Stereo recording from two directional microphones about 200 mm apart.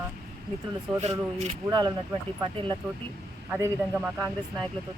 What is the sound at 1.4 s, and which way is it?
Speech, 25° right (ahead or behind).